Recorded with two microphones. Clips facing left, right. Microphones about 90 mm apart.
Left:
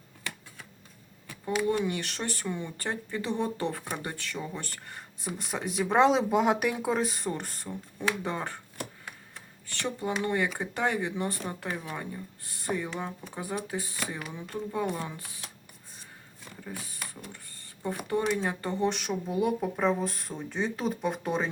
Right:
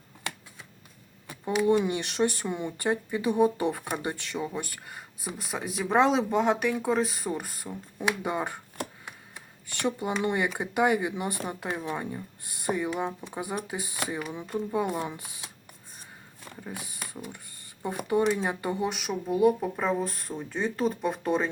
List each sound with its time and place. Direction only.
1.3 s a sound: 20° right (ahead or behind)
1.8 s speech: 20° right (ahead or behind)
16.6 s speech: 15° right (ahead or behind); by 21.5 s centre (ahead or behind)